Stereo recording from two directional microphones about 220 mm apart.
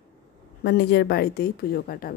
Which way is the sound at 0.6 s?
50° left (ahead or behind).